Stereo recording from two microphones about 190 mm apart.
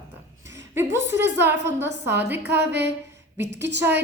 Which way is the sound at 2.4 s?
60° right (ahead or behind).